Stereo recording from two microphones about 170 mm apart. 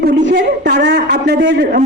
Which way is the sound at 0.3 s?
90° right.